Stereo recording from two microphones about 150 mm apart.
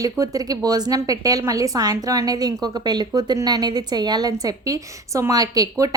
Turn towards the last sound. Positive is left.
turn(degrees=-25)  # may be behind; listen again after turning